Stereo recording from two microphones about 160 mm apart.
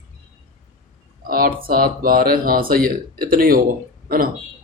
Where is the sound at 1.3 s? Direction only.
65° right (ahead or behind).